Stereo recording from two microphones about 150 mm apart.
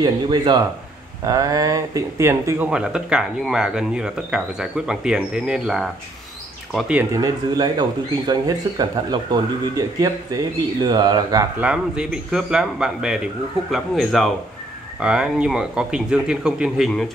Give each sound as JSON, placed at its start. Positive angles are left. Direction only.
{"t": 0.0, "sound": "speech", "side_deg": -30}
{"t": 2.7, "sound": "speech", "side_deg": -5}
{"t": 7.1, "sound": "speech", "side_deg": -25}
{"t": 11.6, "sound": "speech", "side_deg": -5}